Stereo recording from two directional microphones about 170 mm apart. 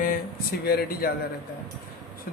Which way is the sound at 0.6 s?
65° left (ahead or behind).